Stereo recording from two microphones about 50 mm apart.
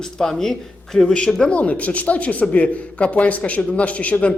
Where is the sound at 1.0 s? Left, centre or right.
Left.